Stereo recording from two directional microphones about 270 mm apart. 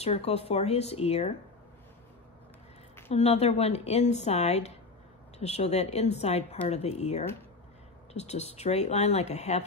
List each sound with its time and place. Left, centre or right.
0.0 s speech: left
3.1 s speech: left